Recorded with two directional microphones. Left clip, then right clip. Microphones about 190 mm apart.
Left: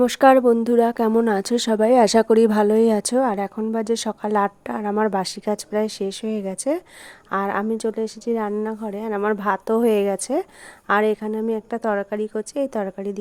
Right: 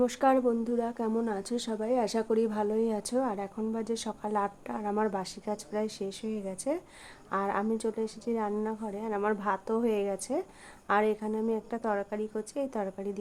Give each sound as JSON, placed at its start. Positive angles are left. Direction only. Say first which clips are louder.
{"t": 0.0, "sound": "a woman's voice", "louder": "left 11 dB", "side_deg": 45}